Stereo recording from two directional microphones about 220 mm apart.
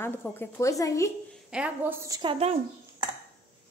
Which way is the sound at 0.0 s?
10° left (ahead or behind).